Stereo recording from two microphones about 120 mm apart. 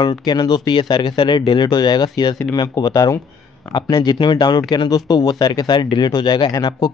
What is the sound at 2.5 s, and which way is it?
Speech, 30° left (ahead or behind).